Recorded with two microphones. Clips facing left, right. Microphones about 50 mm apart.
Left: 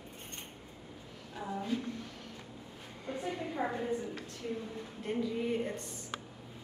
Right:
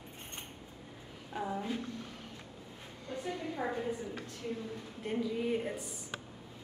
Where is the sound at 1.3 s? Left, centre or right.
Centre.